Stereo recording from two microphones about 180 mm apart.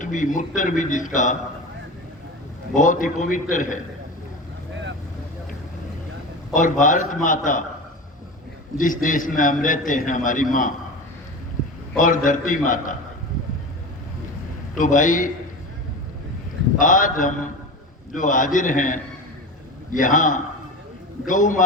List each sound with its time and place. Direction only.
0.0 s a man's voice: 45° left (ahead or behind)
2.7 s a man's voice: 45° left (ahead or behind)
6.5 s a man's voice: 45° left (ahead or behind)
8.8 s a man's voice: 50° left (ahead or behind)
11.9 s a man's voice: 45° left (ahead or behind)
14.8 s a man's voice: 45° left (ahead or behind)
16.7 s a man's voice: 45° left (ahead or behind)